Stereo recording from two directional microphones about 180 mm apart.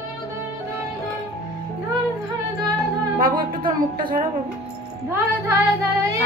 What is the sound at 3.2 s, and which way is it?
Music, 50° right (ahead or behind).